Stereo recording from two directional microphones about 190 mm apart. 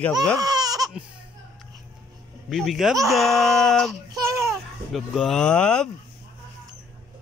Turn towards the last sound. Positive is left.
turn(degrees=5)  # may be behind; listen again after turning